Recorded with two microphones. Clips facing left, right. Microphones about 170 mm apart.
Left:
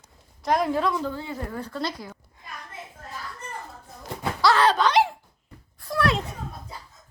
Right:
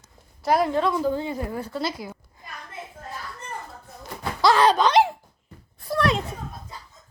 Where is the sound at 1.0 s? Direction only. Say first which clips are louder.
Right 6 dB; 15° right (ahead or behind).